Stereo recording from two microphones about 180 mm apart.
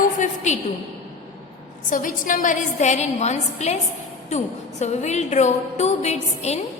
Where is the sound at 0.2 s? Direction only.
40° left (ahead or behind).